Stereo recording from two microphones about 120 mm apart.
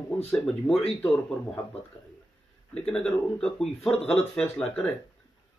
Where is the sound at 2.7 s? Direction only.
5° left (ahead or behind).